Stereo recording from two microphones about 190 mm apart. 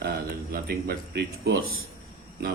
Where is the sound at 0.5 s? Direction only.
55° right (ahead or behind).